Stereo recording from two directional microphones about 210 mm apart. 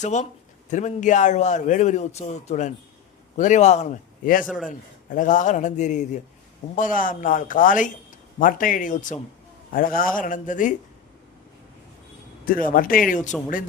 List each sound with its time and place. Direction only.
0.0 s a man's voice: 35° left (ahead or behind)
4.4 s a man's voice: 5° left (ahead or behind)
4.7 s a man's voice: 40° left (ahead or behind)
12.5 s a man's voice: 40° left (ahead or behind)